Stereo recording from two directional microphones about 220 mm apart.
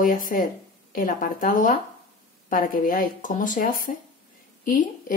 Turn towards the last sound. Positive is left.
turn(degrees=40)  # may be behind; listen again after turning